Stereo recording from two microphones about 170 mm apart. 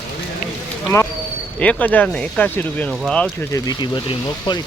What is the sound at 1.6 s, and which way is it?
Speech, 10° left (ahead or behind).